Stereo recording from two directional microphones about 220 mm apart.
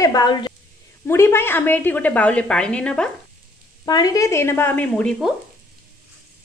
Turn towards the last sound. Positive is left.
turn(degrees=5)  # may be behind; listen again after turning